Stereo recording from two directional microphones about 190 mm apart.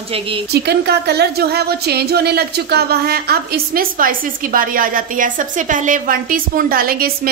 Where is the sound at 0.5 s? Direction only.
60° right (ahead or behind).